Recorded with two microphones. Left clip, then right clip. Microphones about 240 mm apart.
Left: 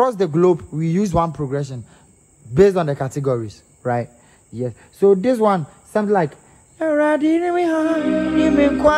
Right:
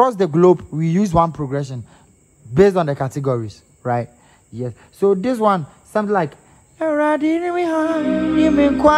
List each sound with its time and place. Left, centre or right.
0.0 s a man's voice: right